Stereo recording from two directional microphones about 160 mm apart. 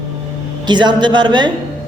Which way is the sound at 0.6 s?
30° right (ahead or behind).